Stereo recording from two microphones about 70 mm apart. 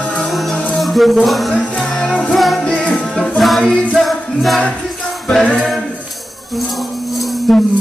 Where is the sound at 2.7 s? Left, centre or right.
Centre.